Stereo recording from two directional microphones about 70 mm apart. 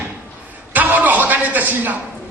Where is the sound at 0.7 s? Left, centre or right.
Right.